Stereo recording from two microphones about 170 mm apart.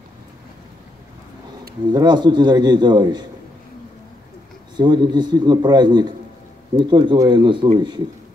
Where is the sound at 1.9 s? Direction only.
25° right (ahead or behind).